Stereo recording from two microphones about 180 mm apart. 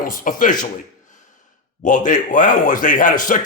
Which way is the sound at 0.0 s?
50° left (ahead or behind).